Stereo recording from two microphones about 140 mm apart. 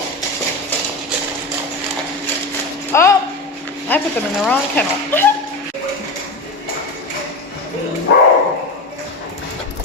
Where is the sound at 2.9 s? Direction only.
20° left (ahead or behind).